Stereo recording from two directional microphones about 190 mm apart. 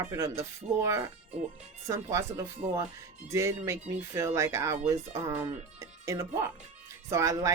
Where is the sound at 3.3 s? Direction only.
15° right (ahead or behind).